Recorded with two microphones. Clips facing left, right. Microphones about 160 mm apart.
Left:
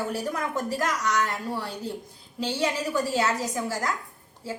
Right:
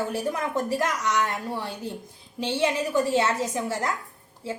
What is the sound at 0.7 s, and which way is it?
A woman's voice, 20° right (ahead or behind).